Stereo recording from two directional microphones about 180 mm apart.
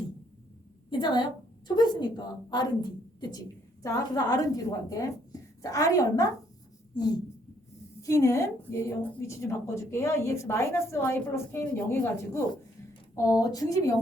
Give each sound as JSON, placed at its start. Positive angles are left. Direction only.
{"t": 0.9, "sound": "a woman's voice", "side_deg": 25}
{"t": 8.0, "sound": "a woman's voice", "side_deg": 15}